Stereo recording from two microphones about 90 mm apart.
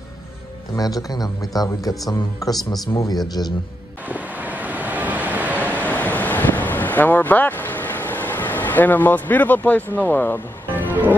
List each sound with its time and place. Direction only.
0.7 s a man's voice: 45° left (ahead or behind)
4.1 s waves: 15° right (ahead or behind)
5.8 s wind: 15° left (ahead or behind)
10.8 s music: 20° right (ahead or behind)